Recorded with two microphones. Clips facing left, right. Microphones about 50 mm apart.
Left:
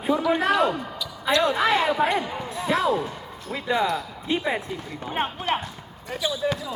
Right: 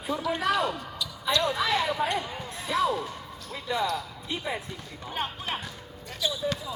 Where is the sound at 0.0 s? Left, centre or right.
Left.